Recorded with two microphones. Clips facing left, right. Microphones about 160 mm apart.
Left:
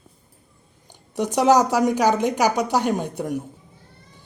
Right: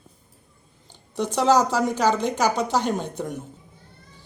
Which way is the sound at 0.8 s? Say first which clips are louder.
Left 2 dB; 15° left (ahead or behind).